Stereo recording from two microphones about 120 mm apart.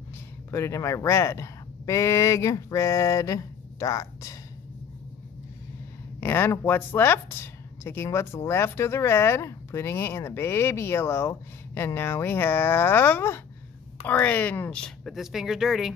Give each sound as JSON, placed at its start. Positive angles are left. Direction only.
{"t": 0.5, "sound": "speech", "side_deg": 25}
{"t": 6.2, "sound": "speech", "side_deg": 20}